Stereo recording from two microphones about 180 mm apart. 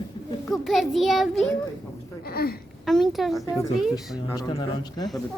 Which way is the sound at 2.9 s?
Centre (ahead or behind).